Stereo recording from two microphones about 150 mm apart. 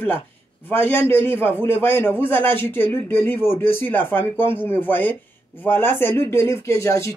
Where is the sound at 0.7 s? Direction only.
15° left (ahead or behind).